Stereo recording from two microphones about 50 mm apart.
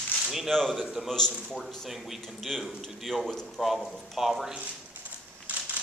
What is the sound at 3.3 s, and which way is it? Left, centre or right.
Speech, centre.